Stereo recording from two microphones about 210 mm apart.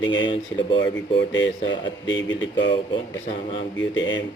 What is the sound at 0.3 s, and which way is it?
Speech, 25° left (ahead or behind).